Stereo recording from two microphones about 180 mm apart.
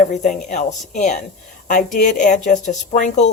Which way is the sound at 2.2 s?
45° left (ahead or behind).